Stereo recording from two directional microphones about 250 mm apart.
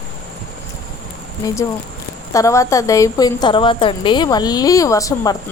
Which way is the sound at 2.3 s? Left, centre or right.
Centre.